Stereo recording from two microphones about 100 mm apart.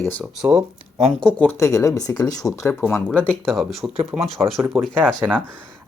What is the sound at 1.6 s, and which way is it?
Speech, 30° left (ahead or behind).